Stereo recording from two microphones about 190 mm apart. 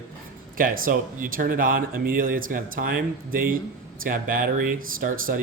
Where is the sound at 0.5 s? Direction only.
45° right (ahead or behind).